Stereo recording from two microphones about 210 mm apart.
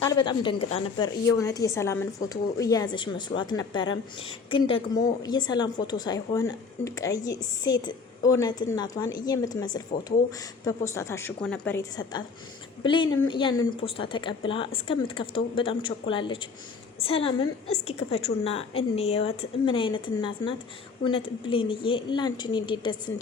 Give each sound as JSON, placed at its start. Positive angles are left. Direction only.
{"t": 0.1, "sound": "a woman's voice", "side_deg": 20}